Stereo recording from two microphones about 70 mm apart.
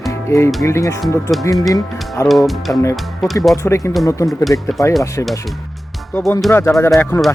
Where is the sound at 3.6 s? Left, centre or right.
Left.